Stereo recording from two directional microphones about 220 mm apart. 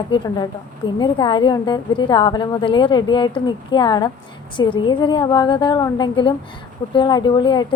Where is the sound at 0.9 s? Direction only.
20° left (ahead or behind).